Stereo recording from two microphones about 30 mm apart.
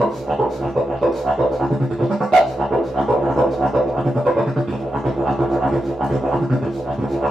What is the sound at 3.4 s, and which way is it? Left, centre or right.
Music, centre.